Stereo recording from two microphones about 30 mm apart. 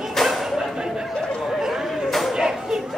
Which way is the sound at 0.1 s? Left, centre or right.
Centre.